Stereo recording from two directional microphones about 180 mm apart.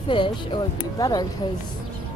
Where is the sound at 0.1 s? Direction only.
30° left (ahead or behind).